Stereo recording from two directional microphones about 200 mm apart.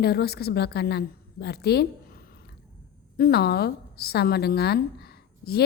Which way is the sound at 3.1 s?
50° left (ahead or behind).